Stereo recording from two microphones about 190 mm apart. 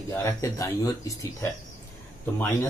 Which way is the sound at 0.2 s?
15° left (ahead or behind).